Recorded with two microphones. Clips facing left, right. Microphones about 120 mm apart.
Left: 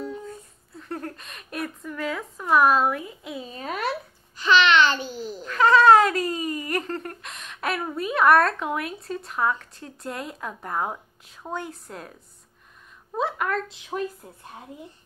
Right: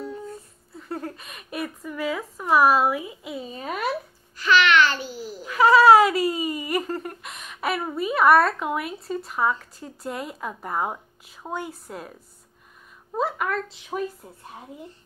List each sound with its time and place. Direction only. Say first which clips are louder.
0.7 s speech: right 1 dB; 5° right (ahead or behind)
4.4 s babbling: even; 20° left (ahead or behind)
5.4 s speech: right 2 dB; 10° right (ahead or behind)